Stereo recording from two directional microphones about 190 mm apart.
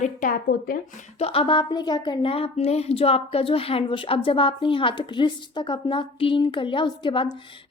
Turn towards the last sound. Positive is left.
turn(degrees=25)  # may be behind; listen again after turning